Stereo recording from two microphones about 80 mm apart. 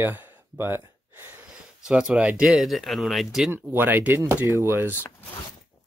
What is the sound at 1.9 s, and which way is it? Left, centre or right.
Speech, centre.